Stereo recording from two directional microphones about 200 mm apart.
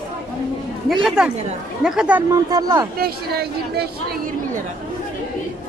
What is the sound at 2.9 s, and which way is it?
Speech, 50° right (ahead or behind).